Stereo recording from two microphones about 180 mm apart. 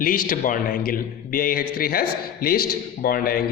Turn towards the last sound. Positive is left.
turn(degrees=55)  # may be behind; listen again after turning